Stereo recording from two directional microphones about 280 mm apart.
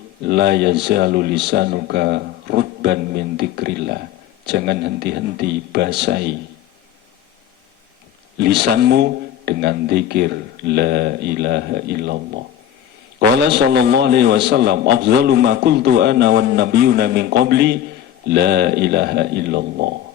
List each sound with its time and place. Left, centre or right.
0.3 s a man's voice: right
8.4 s a man's voice: right